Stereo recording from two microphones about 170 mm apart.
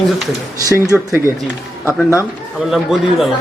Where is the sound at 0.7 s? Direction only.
15° right (ahead or behind).